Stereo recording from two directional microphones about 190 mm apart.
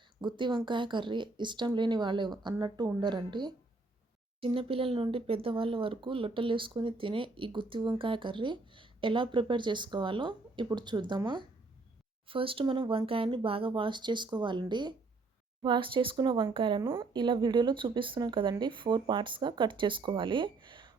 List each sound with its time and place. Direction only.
0.2 s speech: 25° right (ahead or behind)